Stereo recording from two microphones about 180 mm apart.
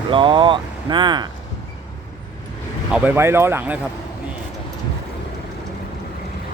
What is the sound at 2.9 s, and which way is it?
Speech, 10° right (ahead or behind).